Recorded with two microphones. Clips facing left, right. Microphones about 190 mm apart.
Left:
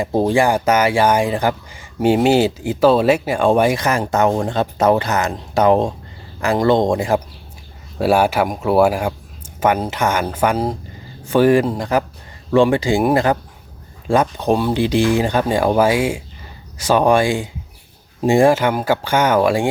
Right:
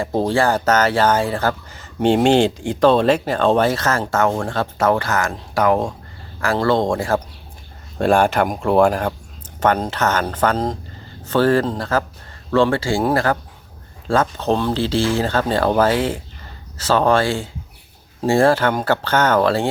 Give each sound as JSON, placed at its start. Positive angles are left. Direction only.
{"t": 0.0, "sound": "speech", "side_deg": 15}
{"t": 7.9, "sound": "speech", "side_deg": 5}